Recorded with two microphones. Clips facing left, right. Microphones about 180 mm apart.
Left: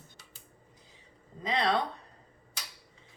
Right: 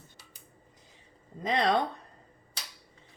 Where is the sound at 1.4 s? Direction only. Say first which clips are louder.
Right 2 dB; 50° right (ahead or behind).